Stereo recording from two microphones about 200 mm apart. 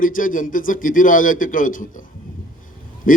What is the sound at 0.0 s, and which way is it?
A man's voice, 45° left (ahead or behind).